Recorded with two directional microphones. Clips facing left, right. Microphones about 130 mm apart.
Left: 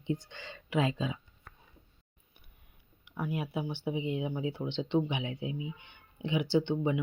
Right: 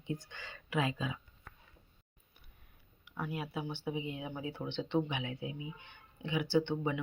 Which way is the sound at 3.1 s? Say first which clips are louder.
Left 4 dB; 15° left (ahead or behind).